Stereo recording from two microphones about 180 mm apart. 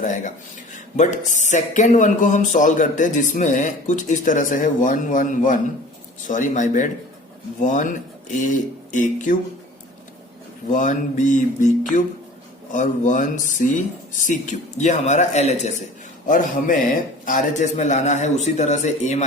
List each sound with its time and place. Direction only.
0.0 s speech: 45° left (ahead or behind)
10.7 s speech: 45° left (ahead or behind)
16.2 s a man's voice: 50° left (ahead or behind)